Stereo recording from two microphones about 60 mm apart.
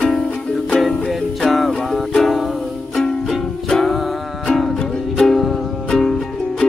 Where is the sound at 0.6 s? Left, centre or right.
Centre.